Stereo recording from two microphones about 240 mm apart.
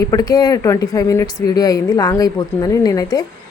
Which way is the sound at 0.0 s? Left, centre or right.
Centre.